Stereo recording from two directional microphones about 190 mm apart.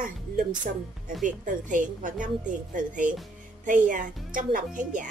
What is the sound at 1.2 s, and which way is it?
A woman's voice, 40° right (ahead or behind).